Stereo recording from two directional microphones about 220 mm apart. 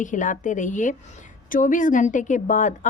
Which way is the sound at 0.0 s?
35° left (ahead or behind).